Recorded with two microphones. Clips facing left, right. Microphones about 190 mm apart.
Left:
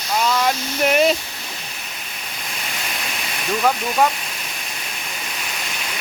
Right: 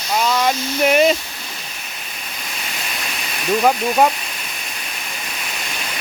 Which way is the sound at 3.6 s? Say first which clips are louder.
Right 3 dB; 20° right (ahead or behind).